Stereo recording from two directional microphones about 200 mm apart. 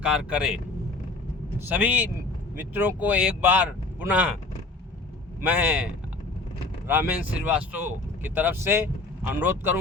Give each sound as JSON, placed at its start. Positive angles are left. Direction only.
{"t": 0.0, "sound": "speech", "side_deg": -5}
{"t": 5.4, "sound": "speech", "side_deg": -10}